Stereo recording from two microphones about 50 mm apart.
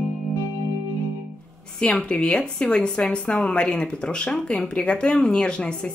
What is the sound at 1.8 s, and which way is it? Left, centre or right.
Speech, left.